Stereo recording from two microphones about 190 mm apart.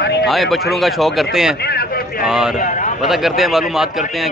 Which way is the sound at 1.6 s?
55° left (ahead or behind).